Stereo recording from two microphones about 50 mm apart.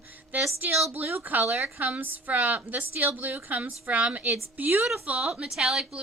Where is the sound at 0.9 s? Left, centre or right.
Right.